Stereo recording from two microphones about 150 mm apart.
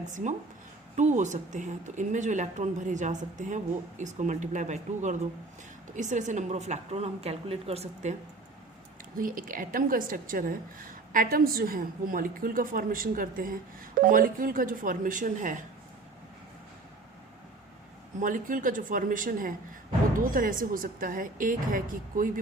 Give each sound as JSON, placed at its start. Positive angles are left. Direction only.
{"t": 0.1, "sound": "a woman's voice", "side_deg": -55}
{"t": 9.1, "sound": "a woman's voice", "side_deg": -65}
{"t": 18.2, "sound": "a woman's voice", "side_deg": -65}